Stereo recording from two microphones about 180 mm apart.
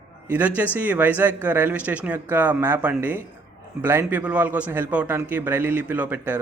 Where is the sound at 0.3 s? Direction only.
10° right (ahead or behind).